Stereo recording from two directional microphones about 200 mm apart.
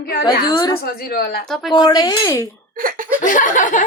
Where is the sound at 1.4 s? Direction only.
Centre (ahead or behind).